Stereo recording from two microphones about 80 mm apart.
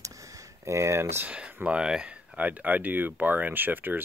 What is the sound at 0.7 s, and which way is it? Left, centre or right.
Speech, right.